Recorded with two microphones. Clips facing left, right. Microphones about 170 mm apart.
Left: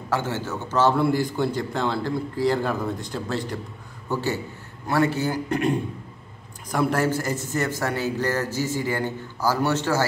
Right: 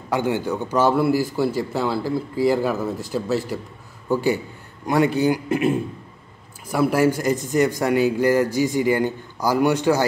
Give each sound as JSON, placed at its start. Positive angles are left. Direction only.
{"t": 0.1, "sound": "a man's voice", "side_deg": -15}